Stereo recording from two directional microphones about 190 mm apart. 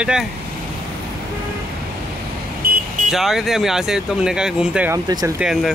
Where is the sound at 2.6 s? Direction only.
50° right (ahead or behind).